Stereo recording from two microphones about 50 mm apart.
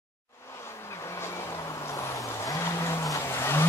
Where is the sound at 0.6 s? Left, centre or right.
Left.